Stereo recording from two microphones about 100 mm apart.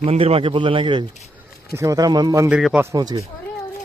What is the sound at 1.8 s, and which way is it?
Speech, 35° right (ahead or behind).